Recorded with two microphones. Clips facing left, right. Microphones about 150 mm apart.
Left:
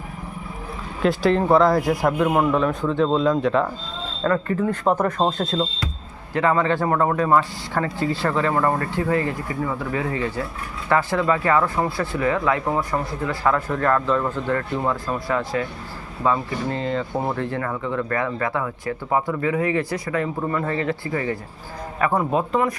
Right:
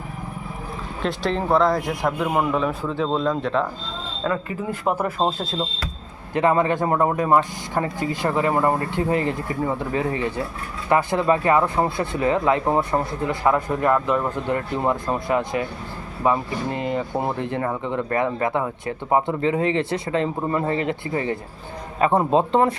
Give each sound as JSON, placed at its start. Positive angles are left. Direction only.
{"t": 1.0, "sound": "speech", "side_deg": 0}
{"t": 6.3, "sound": "speech", "side_deg": -20}